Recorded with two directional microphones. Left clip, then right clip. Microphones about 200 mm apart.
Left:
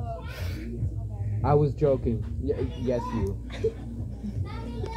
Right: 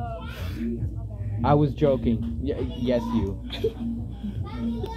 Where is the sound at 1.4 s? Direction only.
30° right (ahead or behind).